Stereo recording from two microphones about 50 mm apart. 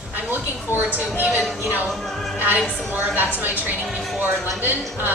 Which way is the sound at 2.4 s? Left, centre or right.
Right.